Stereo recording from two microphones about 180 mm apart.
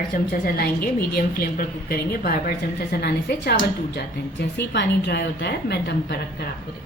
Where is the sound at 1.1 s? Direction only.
55° left (ahead or behind).